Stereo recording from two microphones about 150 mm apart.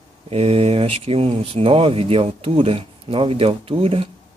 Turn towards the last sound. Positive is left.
turn(degrees=-40)  # may be behind; listen again after turning